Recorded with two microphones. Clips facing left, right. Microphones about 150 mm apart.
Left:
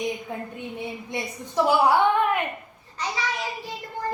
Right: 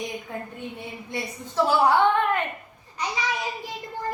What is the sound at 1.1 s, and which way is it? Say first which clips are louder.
Speech: left 1 dB; 15° left (ahead or behind).